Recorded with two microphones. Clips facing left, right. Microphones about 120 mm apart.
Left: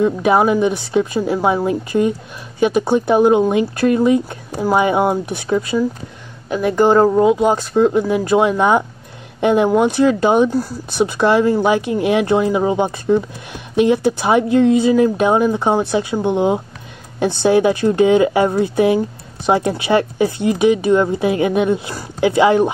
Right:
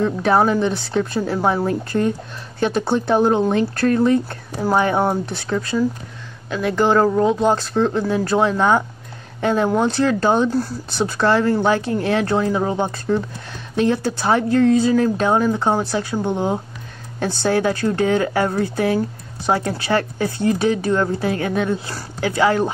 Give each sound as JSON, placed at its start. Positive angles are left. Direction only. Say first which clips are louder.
{"t": 0.0, "sound": "speech", "louder": "left 3 dB", "side_deg": 10}